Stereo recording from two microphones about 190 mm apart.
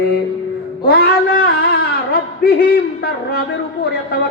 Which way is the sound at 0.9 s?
55° left (ahead or behind).